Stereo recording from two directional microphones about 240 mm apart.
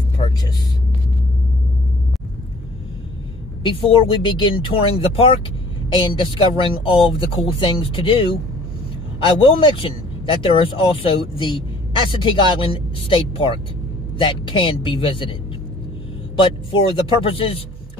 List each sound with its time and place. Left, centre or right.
3.6 s speech: left
16.3 s speech: left